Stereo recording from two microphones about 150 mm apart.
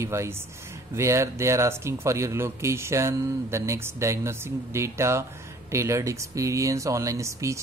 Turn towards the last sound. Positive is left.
turn(degrees=-20)  # may be behind; listen again after turning